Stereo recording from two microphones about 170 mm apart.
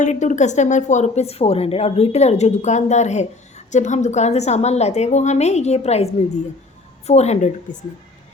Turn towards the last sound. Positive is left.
turn(degrees=40)  # may be behind; listen again after turning